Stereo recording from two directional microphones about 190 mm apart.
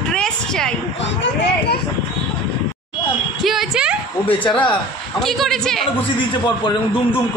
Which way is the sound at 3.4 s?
Centre (ahead or behind).